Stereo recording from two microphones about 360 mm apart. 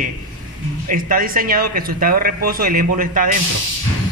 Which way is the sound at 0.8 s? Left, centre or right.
Right.